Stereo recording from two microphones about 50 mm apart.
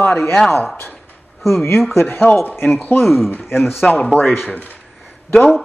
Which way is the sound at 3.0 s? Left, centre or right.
Centre.